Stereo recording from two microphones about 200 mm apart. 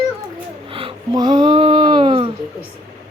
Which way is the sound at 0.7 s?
25° right (ahead or behind).